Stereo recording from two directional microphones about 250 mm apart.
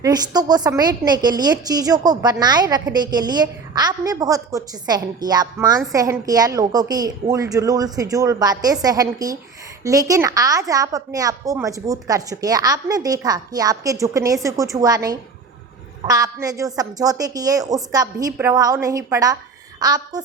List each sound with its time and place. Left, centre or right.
0.0 s a woman's voice: centre